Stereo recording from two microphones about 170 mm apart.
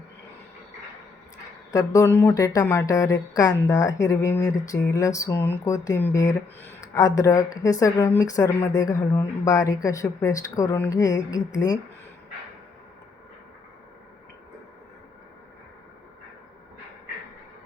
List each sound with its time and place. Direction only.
1.7 s speech: 20° left (ahead or behind)